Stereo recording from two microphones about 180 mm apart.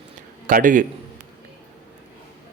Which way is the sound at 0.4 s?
50° right (ahead or behind).